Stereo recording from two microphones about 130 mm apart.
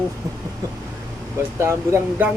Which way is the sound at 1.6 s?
20° right (ahead or behind).